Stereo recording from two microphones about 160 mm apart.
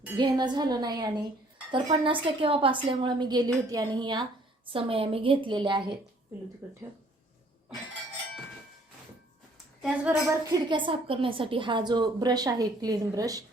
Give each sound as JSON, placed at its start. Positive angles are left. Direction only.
{"t": 0.2, "sound": "a woman's voice", "side_deg": -25}
{"t": 6.6, "sound": "speech", "side_deg": -15}
{"t": 9.8, "sound": "speech", "side_deg": -5}
{"t": 10.2, "sound": "a woman's voice", "side_deg": -25}